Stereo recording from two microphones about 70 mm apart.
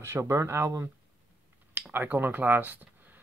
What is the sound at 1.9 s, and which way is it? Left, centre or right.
Speech, right.